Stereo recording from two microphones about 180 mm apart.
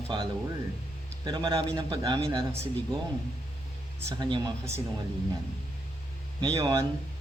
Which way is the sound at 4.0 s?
15° right (ahead or behind).